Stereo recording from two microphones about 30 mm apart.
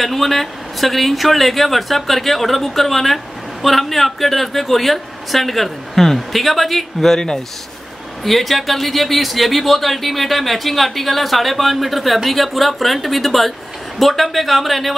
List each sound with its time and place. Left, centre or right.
0.0 s speech: centre
7.2 s speech: left
8.2 s speech: centre